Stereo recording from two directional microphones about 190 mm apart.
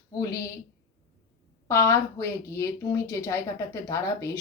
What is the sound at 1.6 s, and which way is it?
Speech, 15° left (ahead or behind).